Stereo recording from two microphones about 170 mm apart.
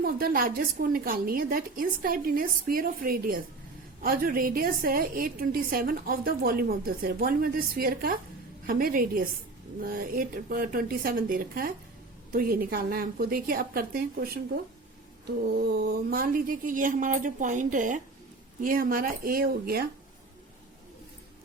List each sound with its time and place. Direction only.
0.0 s a woman's voice: 60° right (ahead or behind)
15.5 s a woman's voice: 70° right (ahead or behind)